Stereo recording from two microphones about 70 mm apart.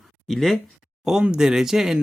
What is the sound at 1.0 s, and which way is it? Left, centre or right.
Speech, centre.